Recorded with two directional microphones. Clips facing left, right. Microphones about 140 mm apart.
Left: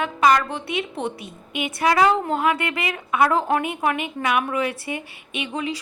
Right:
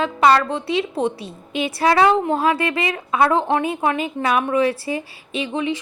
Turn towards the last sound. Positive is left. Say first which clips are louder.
# right 4 dB
turn(degrees=-25)  # may be behind; listen again after turning